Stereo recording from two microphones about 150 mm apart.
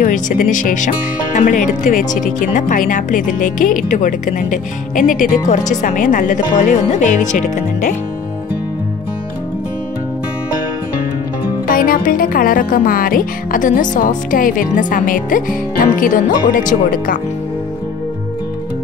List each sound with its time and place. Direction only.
0.0 s speech: 60° left (ahead or behind)
11.6 s speech: 70° left (ahead or behind)